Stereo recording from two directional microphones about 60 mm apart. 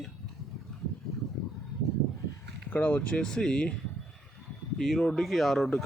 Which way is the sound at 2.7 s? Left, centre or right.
Left.